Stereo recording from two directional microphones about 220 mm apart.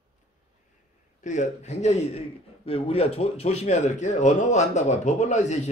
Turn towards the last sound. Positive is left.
turn(degrees=30)  # may be behind; listen again after turning